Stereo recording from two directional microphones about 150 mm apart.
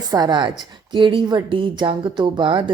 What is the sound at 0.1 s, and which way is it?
Speech, 25° right (ahead or behind).